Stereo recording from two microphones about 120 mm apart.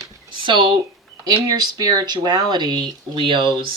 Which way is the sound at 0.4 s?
40° right (ahead or behind).